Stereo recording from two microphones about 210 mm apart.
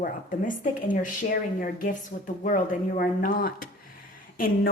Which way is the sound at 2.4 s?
40° left (ahead or behind).